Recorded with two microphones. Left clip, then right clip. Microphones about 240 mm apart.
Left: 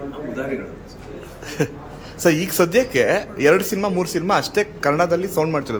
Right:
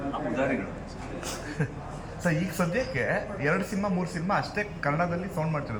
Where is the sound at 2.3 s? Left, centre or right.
Left.